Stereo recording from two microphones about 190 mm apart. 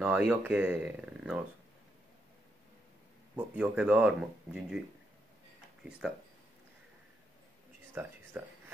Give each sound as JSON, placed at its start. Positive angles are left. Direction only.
{"t": 0.0, "sound": "speech", "side_deg": -10}
{"t": 3.3, "sound": "speech", "side_deg": -5}
{"t": 5.9, "sound": "speech", "side_deg": -5}
{"t": 7.9, "sound": "speech", "side_deg": -10}